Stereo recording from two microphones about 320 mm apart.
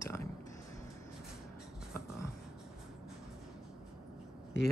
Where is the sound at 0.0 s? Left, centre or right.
Centre.